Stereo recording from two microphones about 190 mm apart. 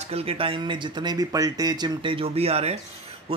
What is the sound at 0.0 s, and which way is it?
Speech, 30° right (ahead or behind).